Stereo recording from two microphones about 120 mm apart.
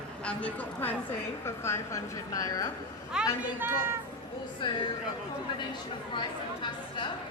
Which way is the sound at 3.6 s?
20° right (ahead or behind).